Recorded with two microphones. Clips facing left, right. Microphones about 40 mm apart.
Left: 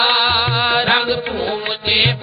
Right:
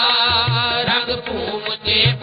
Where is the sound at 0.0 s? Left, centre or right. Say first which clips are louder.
Left 2 dB; centre.